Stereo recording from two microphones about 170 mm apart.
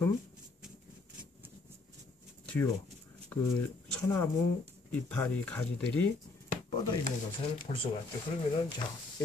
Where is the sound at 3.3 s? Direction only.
10° left (ahead or behind).